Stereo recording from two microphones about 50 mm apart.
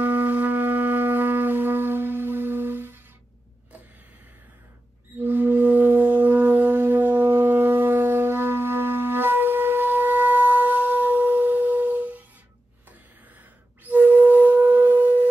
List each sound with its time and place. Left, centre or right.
0.0 s wind instrument: right
5.2 s wind instrument: right
13.8 s music: right